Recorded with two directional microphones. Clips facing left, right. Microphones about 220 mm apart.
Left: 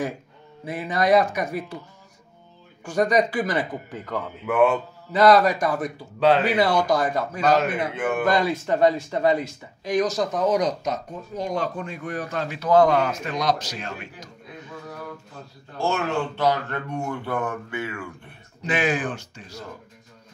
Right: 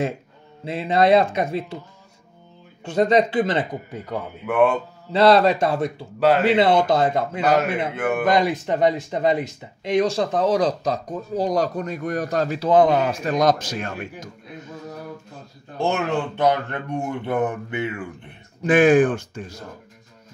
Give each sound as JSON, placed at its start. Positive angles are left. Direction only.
{"t": 0.7, "sound": "speech", "side_deg": -25}
{"t": 2.8, "sound": "speech", "side_deg": -25}
{"t": 3.9, "sound": "speech", "side_deg": -10}
{"t": 4.5, "sound": "speech", "side_deg": 5}
{"t": 5.1, "sound": "speech", "side_deg": -30}
{"t": 6.1, "sound": "speech", "side_deg": -5}
{"t": 6.4, "sound": "speech", "side_deg": -25}
{"t": 8.0, "sound": "speech", "side_deg": -5}
{"t": 8.3, "sound": "speech", "side_deg": -20}
{"t": 12.6, "sound": "speech", "side_deg": -20}
{"t": 13.2, "sound": "a man's voice", "side_deg": -45}
{"t": 15.8, "sound": "speech", "side_deg": -20}
{"t": 18.6, "sound": "speech", "side_deg": -50}